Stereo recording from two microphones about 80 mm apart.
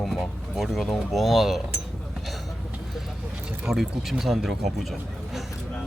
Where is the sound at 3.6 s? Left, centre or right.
Centre.